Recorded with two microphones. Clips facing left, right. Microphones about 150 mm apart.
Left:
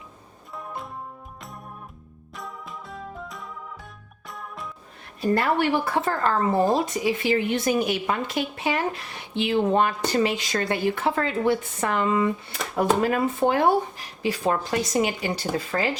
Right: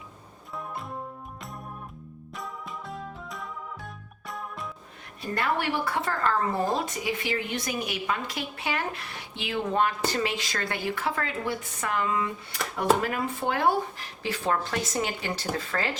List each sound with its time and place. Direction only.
2.3 s music: centre (ahead or behind)
5.3 s speech: 30° left (ahead or behind); by 16.0 s 15° left (ahead or behind)